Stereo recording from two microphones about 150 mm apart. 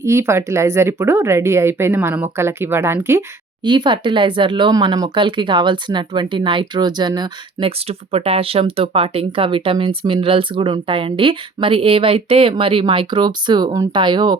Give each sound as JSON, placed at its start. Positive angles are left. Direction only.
{"t": 0.0, "sound": "speech", "side_deg": -15}
{"t": 3.6, "sound": "speech", "side_deg": -30}
{"t": 7.9, "sound": "speech", "side_deg": -40}